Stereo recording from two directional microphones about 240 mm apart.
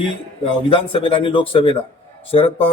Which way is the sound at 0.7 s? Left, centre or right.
Left.